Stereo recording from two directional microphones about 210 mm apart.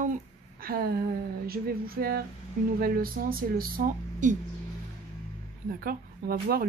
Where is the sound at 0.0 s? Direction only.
40° right (ahead or behind).